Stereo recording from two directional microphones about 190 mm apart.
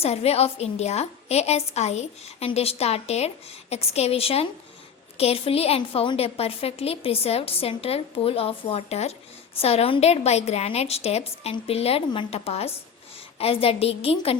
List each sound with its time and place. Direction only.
0.0 s a woman's voice: 30° left (ahead or behind)